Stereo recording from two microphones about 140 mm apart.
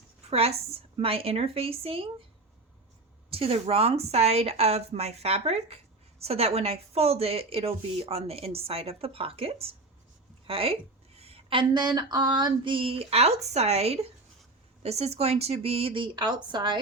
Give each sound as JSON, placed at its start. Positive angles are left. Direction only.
{"t": 0.3, "sound": "speech", "side_deg": -45}
{"t": 3.2, "sound": "a woman's voice", "side_deg": -40}